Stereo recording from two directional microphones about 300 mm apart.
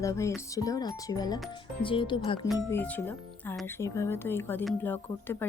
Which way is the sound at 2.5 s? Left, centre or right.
Centre.